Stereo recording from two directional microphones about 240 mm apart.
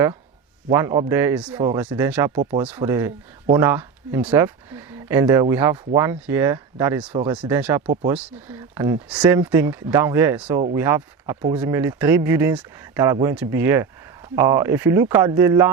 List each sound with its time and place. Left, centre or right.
0.7 s speech: centre
1.5 s speech: centre
1.9 s speech: centre
2.4 s speech: right
2.7 s speech: centre
7.3 s speech: centre